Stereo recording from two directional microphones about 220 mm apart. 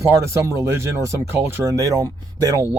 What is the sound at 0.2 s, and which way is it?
Speech, 15° right (ahead or behind).